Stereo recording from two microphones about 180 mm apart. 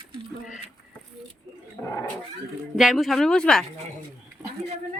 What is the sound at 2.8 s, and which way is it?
Speech, centre (ahead or behind).